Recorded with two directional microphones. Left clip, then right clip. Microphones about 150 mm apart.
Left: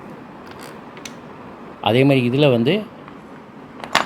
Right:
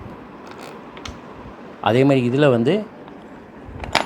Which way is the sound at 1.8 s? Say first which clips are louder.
Even; 5° left (ahead or behind).